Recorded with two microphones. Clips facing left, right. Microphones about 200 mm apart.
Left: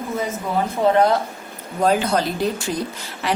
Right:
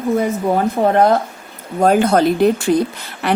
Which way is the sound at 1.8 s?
50° right (ahead or behind).